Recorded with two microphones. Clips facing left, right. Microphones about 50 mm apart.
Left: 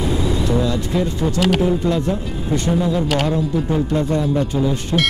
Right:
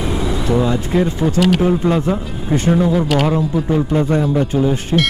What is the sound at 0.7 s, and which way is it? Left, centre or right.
Speech, right.